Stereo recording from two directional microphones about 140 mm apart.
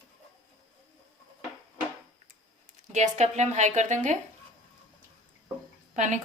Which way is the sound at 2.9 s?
55° right (ahead or behind).